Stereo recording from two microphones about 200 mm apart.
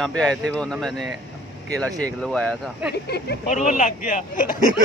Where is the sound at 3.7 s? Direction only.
40° left (ahead or behind).